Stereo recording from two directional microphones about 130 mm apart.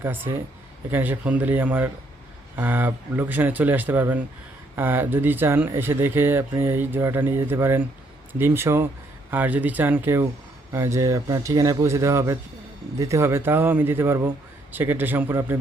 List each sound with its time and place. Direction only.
0.0 s speech: 15° right (ahead or behind)